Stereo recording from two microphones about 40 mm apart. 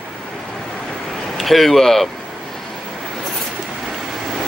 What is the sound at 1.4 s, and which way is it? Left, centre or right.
Speech, centre.